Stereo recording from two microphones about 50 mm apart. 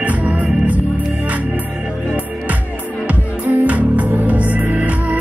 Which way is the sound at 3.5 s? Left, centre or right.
Right.